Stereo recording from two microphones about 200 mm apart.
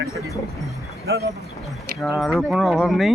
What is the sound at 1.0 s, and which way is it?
Speech, 55° right (ahead or behind).